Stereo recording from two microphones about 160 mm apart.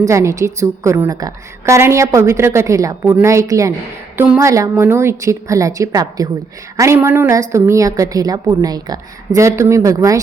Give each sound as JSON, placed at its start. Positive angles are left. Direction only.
{"t": 0.0, "sound": "a woman's voice", "side_deg": -20}